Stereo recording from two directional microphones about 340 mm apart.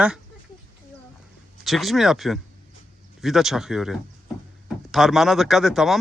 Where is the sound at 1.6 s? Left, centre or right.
Centre.